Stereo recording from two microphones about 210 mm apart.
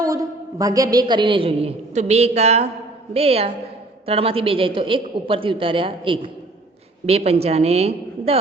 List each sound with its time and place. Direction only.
0.0 s a woman's voice: 15° right (ahead or behind)